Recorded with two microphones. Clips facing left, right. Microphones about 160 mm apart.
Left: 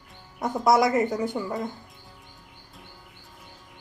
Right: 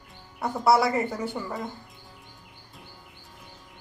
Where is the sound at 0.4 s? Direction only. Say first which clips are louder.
Left 1 dB; 15° left (ahead or behind).